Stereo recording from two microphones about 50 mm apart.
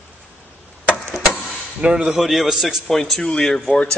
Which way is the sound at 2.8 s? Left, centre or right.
Centre.